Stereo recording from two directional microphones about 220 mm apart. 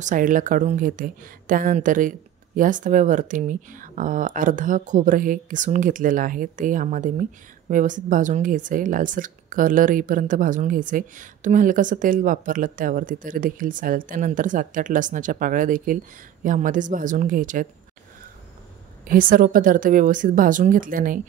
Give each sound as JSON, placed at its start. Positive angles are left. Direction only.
{"t": 0.0, "sound": "speech", "side_deg": -35}
{"t": 19.0, "sound": "speech", "side_deg": -40}